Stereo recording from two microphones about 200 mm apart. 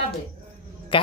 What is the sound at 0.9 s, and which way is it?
Speech, 25° left (ahead or behind).